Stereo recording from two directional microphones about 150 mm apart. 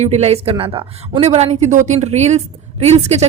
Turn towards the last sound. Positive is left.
turn(degrees=-45)  # may be behind; listen again after turning